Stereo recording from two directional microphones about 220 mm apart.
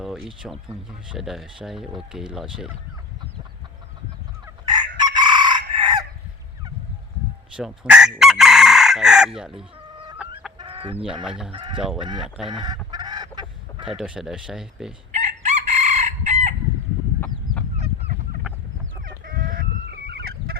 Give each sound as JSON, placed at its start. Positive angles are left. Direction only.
{"t": 0.0, "sound": "speech", "side_deg": 0}
{"t": 4.4, "sound": "chicken", "side_deg": -20}
{"t": 7.5, "sound": "chicken", "side_deg": -5}
{"t": 10.6, "sound": "chicken", "side_deg": -25}
{"t": 11.3, "sound": "speech", "side_deg": -5}
{"t": 11.5, "sound": "chicken", "side_deg": -20}
{"t": 12.5, "sound": "fowl", "side_deg": -20}
{"t": 14.0, "sound": "speech", "side_deg": -5}
{"t": 15.1, "sound": "chicken", "side_deg": -30}
{"t": 17.2, "sound": "chicken", "side_deg": 5}
{"t": 17.7, "sound": "honk", "side_deg": -30}
{"t": 19.2, "sound": "chicken", "side_deg": -40}